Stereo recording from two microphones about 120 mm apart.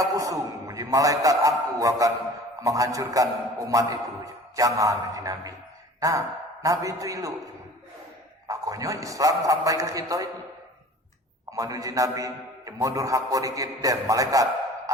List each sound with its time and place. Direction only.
0.0 s a man's voice: 30° right (ahead or behind)
8.4 s a man's voice: 30° right (ahead or behind)
11.5 s a man's voice: 30° right (ahead or behind)